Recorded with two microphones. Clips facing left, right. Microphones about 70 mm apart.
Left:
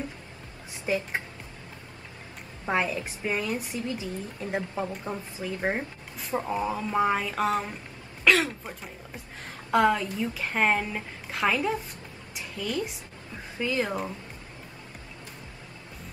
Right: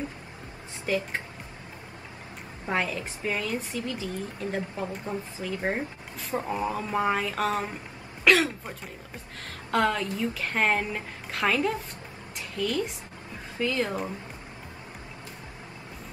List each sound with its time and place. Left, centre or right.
0.9 s a woman's voice: left
2.6 s a woman's voice: left
6.4 s a sound: centre
8.2 s throat clearing: centre
9.7 s a woman's voice: centre